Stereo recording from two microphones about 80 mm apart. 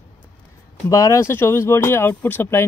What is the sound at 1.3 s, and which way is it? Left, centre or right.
Speech, left.